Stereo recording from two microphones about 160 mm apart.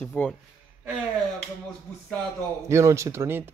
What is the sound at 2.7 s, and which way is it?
Speech, 20° right (ahead or behind).